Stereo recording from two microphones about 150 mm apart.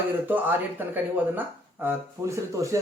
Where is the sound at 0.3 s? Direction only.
10° right (ahead or behind).